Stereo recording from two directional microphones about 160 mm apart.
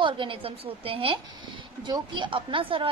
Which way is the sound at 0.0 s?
30° right (ahead or behind).